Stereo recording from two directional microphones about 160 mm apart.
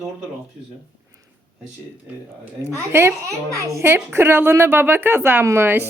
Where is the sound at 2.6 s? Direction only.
20° right (ahead or behind).